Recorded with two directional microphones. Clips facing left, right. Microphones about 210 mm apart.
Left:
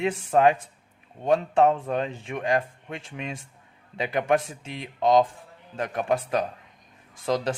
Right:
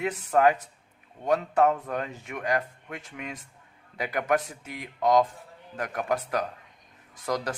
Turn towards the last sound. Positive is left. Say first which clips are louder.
# left 4 dB
turn(degrees=25)  # may be behind; listen again after turning